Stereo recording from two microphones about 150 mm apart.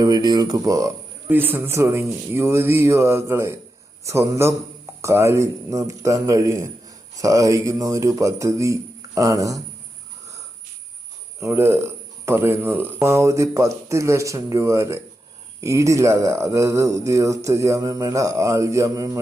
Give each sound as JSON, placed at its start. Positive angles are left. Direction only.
{"t": 0.0, "sound": "a man's voice", "side_deg": -25}
{"t": 11.3, "sound": "speech", "side_deg": -15}